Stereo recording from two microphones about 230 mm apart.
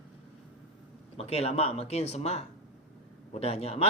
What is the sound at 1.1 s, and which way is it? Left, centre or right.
Speech, left.